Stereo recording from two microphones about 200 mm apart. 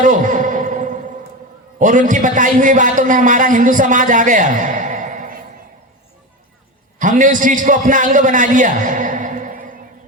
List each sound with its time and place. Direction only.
0.0 s a sound: 40° right (ahead or behind)
1.8 s a man's voice: 40° right (ahead or behind)
7.0 s a man's voice: 40° right (ahead or behind)